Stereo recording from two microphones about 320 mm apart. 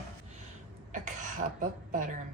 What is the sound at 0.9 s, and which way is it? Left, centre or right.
Cough, right.